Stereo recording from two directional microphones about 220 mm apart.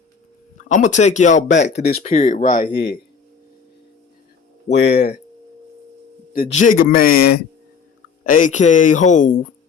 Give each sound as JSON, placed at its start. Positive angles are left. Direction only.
{"t": 0.7, "sound": "speech", "side_deg": 35}
{"t": 1.5, "sound": "speech", "side_deg": 50}
{"t": 2.7, "sound": "speech", "side_deg": 50}
{"t": 4.7, "sound": "speech", "side_deg": 50}
{"t": 6.3, "sound": "speech", "side_deg": 35}